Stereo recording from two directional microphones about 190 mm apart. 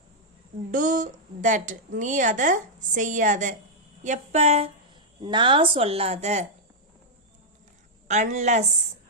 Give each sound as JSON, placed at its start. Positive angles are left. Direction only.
{"t": 0.7, "sound": "a woman's voice", "side_deg": -45}
{"t": 8.0, "sound": "a woman's voice", "side_deg": -40}